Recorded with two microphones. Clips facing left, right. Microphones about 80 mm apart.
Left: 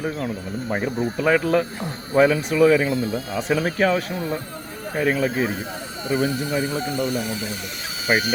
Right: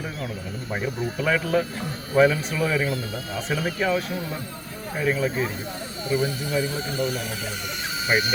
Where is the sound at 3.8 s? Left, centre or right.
Left.